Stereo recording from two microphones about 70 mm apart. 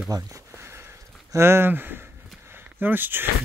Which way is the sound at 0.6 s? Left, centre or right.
Right.